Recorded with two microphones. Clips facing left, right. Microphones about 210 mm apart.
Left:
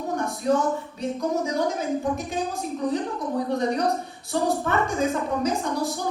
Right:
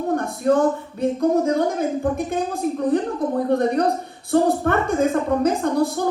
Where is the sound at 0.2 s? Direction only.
55° right (ahead or behind).